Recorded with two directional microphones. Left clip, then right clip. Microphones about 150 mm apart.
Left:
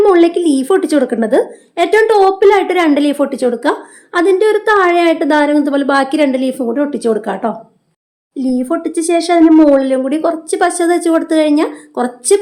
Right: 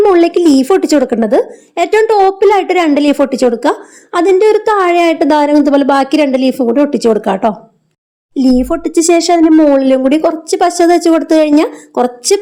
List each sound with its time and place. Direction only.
0.1 s a woman's voice: 35° right (ahead or behind)